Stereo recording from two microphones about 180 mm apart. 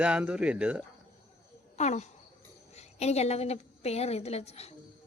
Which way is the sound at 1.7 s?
40° left (ahead or behind).